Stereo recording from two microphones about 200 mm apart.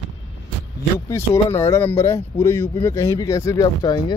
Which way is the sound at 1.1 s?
15° left (ahead or behind).